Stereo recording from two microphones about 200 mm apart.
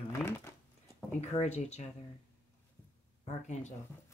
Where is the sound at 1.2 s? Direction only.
35° left (ahead or behind).